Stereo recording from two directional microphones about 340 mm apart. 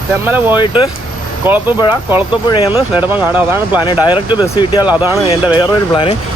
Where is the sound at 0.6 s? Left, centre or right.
Centre.